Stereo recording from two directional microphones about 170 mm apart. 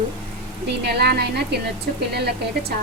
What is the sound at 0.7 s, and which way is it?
Speech, 70° right (ahead or behind).